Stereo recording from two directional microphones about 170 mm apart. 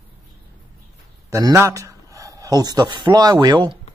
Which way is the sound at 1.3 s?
20° right (ahead or behind).